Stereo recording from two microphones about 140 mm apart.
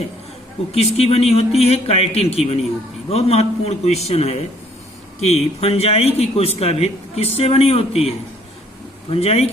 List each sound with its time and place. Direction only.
0.7 s a man's voice: 45° left (ahead or behind)